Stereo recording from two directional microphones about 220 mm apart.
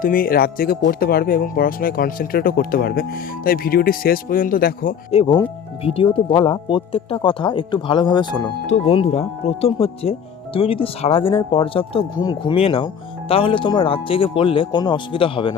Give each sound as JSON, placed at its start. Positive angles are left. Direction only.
{"t": 0.0, "sound": "speech", "side_deg": 40}
{"t": 5.1, "sound": "speech", "side_deg": 20}